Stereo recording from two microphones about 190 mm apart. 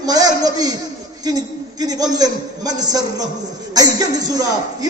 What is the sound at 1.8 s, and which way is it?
A man's voice, 20° right (ahead or behind).